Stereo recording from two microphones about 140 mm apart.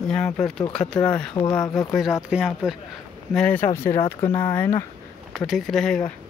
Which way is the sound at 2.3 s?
5° right (ahead or behind).